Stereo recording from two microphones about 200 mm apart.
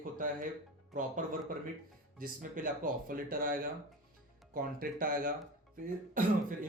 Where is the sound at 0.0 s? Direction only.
40° right (ahead or behind).